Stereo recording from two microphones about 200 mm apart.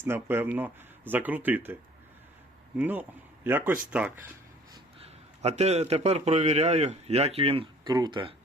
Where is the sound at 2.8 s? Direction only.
10° right (ahead or behind).